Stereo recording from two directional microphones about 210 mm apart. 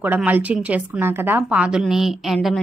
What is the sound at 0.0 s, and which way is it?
A woman's voice, 10° right (ahead or behind).